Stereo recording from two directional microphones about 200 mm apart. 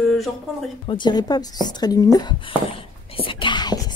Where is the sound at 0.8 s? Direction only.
25° left (ahead or behind).